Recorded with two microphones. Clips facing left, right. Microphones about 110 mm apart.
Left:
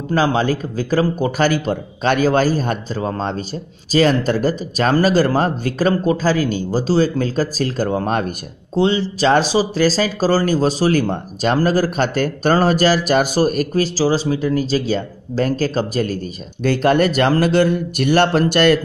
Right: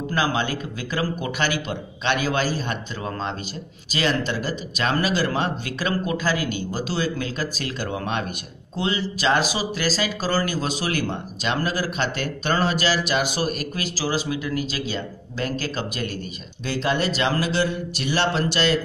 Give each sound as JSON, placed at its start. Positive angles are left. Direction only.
{"t": 0.1, "sound": "a man's voice", "side_deg": 35}
{"t": 8.7, "sound": "speech", "side_deg": 30}
{"t": 16.6, "sound": "a man's voice", "side_deg": 55}